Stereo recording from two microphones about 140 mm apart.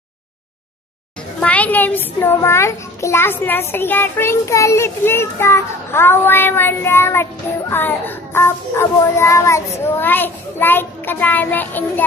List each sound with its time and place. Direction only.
1.4 s a child's voice: 10° left (ahead or behind)